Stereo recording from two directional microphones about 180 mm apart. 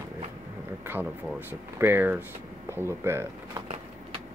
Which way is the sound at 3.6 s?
35° right (ahead or behind).